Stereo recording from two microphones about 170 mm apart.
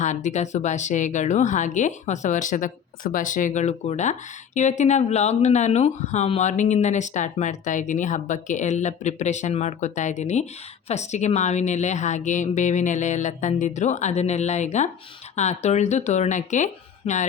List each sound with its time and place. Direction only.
0.0 s a woman's voice: 45° left (ahead or behind)
17.0 s speech: 35° left (ahead or behind)